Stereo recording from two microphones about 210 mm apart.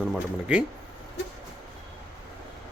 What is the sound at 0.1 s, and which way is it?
Speech, 5° right (ahead or behind).